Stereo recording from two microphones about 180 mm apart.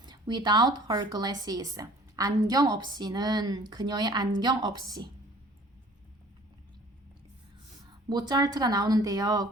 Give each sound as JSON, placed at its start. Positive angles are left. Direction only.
{"t": 0.0, "sound": "speech", "side_deg": -25}
{"t": 8.1, "sound": "speech", "side_deg": -25}